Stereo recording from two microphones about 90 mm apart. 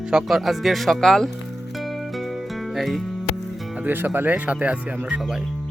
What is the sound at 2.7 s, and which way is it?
Speech, centre (ahead or behind).